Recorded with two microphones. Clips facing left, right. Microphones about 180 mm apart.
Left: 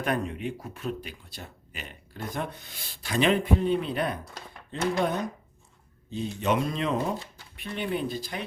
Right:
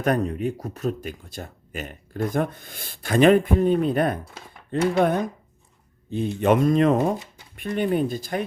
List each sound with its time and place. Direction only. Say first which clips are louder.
0.0 s speech: right 6 dB; 40° right (ahead or behind)